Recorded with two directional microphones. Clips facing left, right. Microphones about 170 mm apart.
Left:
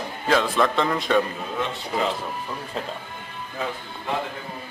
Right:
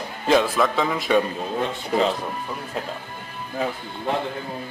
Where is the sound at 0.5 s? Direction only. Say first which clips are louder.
Even; centre (ahead or behind).